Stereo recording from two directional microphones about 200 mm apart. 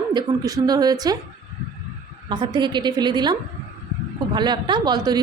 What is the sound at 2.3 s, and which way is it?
Speech, 20° right (ahead or behind).